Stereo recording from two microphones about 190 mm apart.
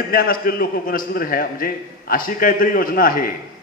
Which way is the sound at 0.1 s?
50° left (ahead or behind).